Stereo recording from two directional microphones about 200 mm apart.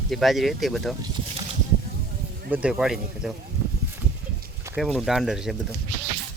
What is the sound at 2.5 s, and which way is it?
Speech, 5° right (ahead or behind).